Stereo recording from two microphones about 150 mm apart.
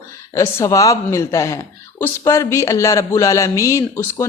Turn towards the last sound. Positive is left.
turn(degrees=20)  # may be behind; listen again after turning